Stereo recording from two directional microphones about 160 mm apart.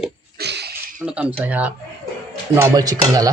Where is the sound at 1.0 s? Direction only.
5° right (ahead or behind).